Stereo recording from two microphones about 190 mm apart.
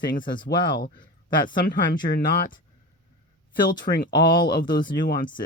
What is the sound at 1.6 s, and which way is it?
Speech, 45° left (ahead or behind).